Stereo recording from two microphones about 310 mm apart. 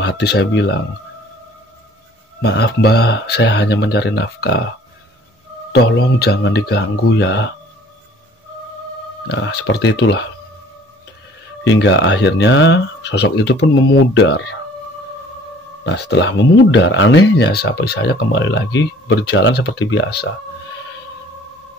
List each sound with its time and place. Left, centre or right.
0.0 s speech: left
2.4 s speech: left
5.7 s speech: left
9.3 s speech: left
11.6 s speech: left
15.8 s speech: left